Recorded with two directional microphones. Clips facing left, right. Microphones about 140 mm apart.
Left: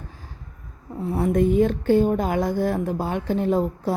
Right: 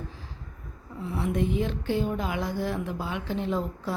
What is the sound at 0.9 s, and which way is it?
A woman's voice, 45° left (ahead or behind).